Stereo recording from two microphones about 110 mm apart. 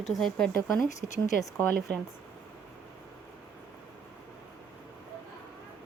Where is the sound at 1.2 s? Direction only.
20° left (ahead or behind).